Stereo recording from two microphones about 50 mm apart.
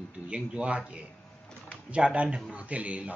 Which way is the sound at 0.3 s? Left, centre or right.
Right.